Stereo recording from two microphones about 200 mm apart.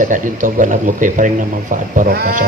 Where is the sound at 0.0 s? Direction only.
40° right (ahead or behind).